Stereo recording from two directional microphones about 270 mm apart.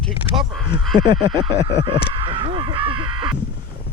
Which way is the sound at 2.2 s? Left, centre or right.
Centre.